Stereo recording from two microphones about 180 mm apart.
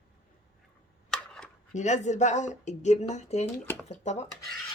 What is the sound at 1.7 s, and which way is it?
Speech, 40° left (ahead or behind).